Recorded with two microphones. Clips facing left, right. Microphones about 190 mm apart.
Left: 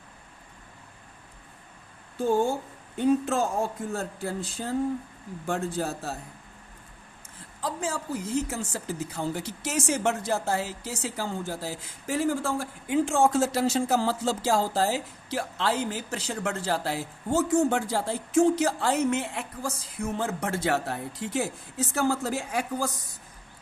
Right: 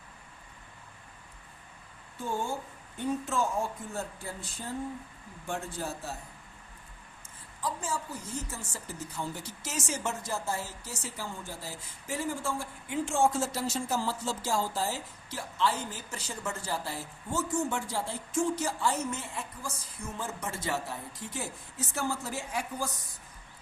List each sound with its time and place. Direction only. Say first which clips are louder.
3.0 s speech: left 7 dB; 90° left
7.6 s speech: left 3 dB; 90° left